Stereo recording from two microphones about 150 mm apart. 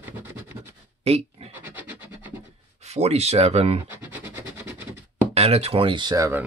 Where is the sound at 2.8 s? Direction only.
45° right (ahead or behind).